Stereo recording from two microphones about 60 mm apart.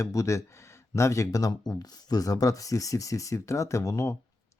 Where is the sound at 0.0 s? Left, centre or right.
Left.